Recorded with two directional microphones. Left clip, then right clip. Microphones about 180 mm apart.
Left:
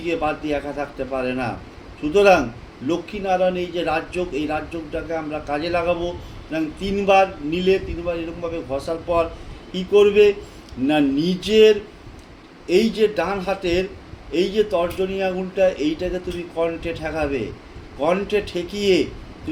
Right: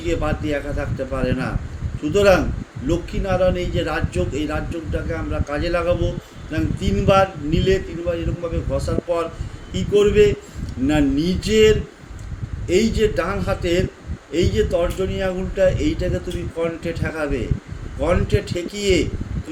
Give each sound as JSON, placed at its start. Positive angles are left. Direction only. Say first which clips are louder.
{"t": 0.0, "sound": "a man's voice", "louder": "left 1 dB", "side_deg": -10}